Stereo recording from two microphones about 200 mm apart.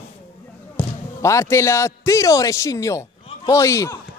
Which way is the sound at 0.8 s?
5° left (ahead or behind).